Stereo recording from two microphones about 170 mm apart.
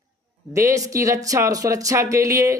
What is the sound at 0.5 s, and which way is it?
A man's voice, 20° right (ahead or behind).